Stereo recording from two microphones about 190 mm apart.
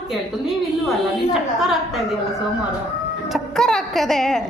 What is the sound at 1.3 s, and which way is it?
Speech, centre (ahead or behind).